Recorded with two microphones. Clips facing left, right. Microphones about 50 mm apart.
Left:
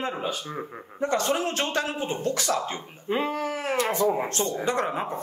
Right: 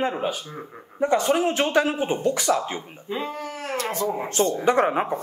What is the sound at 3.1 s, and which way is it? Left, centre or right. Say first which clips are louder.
Speech: left 3 dB; left.